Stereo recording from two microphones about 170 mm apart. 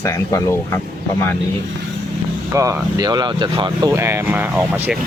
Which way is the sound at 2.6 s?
15° right (ahead or behind).